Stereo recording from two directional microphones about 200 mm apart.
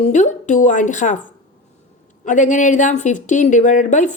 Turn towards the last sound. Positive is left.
turn(degrees=40)  # may be behind; listen again after turning